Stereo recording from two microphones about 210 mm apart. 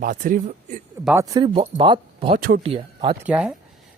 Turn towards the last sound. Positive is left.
turn(degrees=-5)  # may be behind; listen again after turning